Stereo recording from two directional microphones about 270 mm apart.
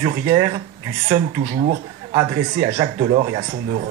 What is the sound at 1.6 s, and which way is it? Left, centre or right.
Speech, centre.